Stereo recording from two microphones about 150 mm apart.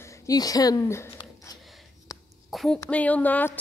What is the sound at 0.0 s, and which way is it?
Speech, 25° left (ahead or behind).